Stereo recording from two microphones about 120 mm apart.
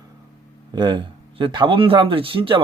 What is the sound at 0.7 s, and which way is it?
Speech, 40° right (ahead or behind).